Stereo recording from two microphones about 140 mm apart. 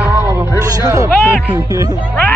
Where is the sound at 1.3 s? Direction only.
10° right (ahead or behind).